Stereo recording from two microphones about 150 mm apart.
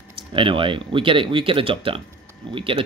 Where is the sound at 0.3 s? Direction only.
35° right (ahead or behind).